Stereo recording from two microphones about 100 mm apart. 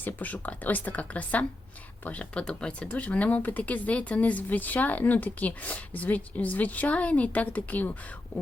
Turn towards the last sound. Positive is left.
turn(degrees=15)  # may be behind; listen again after turning